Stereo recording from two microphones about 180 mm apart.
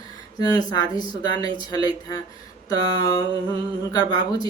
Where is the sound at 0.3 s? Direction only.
20° left (ahead or behind).